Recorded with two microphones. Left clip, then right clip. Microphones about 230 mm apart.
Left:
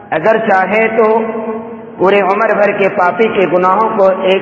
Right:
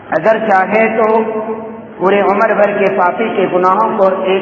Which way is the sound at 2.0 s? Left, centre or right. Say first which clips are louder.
Left 1 dB; left.